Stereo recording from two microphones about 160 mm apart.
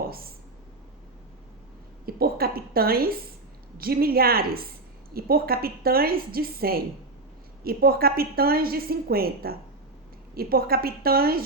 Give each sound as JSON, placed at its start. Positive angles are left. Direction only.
{"t": 2.0, "sound": "a woman's voice", "side_deg": -70}